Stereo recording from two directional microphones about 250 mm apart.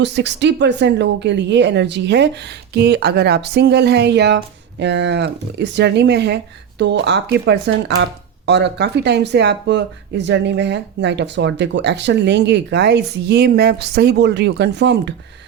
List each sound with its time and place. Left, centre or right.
0.0 s speech: right